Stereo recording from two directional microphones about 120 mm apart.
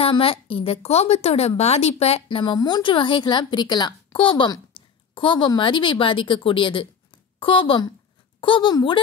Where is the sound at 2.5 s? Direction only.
35° left (ahead or behind).